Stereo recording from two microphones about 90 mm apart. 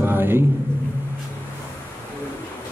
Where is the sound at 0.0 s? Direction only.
25° right (ahead or behind).